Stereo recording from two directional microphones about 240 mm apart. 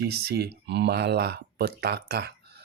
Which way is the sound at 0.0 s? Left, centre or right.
Right.